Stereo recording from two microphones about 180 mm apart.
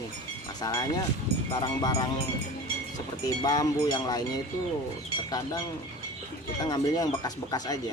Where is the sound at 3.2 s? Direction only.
20° left (ahead or behind).